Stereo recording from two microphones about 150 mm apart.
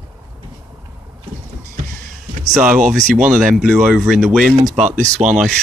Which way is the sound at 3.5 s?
5° right (ahead or behind).